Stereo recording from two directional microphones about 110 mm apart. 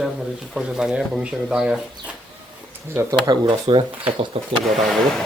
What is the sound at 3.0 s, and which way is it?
Speech, 35° right (ahead or behind).